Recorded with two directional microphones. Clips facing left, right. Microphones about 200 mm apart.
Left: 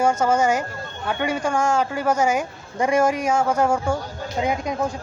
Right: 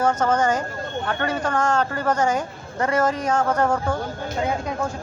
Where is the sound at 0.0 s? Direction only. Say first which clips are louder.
Left 1 dB; 10° left (ahead or behind).